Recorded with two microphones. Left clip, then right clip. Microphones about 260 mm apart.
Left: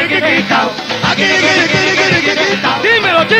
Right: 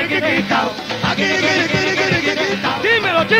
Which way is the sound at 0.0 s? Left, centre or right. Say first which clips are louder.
Left 5 dB; left.